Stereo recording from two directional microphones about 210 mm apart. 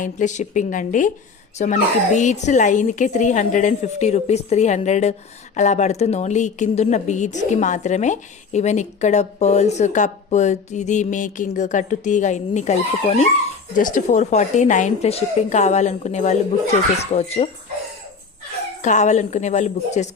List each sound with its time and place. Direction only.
0.0 s a woman's voice: 35° left (ahead or behind)
18.8 s a woman's voice: 35° left (ahead or behind)